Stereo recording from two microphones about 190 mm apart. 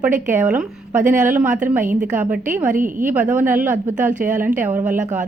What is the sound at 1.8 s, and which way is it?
Speech, 45° right (ahead or behind).